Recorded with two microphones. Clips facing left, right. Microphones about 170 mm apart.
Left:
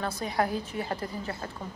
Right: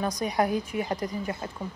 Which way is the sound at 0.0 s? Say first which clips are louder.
Right 3 dB; 15° right (ahead or behind).